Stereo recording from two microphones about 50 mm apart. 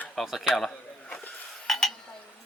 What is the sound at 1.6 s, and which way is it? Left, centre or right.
Dishes, centre.